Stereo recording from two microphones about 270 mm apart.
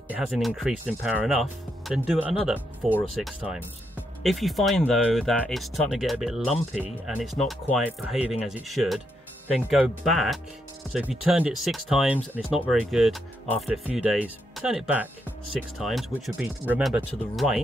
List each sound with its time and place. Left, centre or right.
0.1 s speech: centre